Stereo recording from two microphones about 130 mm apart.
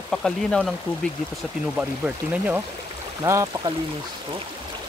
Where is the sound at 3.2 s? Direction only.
25° right (ahead or behind).